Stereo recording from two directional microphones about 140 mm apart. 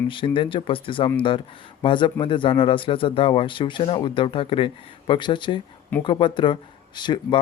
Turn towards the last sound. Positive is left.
turn(degrees=35)  # may be behind; listen again after turning